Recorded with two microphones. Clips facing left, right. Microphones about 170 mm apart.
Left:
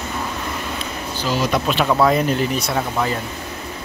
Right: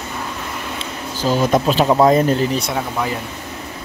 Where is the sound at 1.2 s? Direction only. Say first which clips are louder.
Right 5 dB; 45° right (ahead or behind).